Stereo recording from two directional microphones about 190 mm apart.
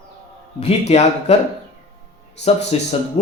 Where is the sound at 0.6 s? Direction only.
35° left (ahead or behind).